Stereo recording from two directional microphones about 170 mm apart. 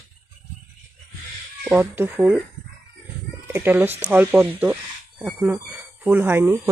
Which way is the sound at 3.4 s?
10° right (ahead or behind).